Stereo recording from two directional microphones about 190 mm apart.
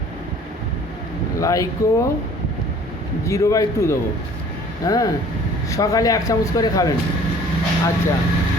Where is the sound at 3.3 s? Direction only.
15° left (ahead or behind).